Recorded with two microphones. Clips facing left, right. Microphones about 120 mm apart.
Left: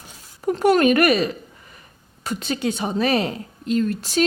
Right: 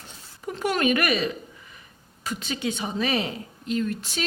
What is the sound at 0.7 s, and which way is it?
A woman's voice, 50° left (ahead or behind).